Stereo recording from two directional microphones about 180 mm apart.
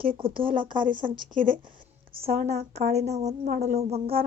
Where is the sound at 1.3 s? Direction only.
50° right (ahead or behind).